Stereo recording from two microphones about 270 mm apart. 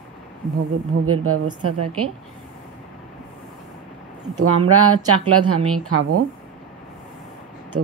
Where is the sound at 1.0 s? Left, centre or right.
Right.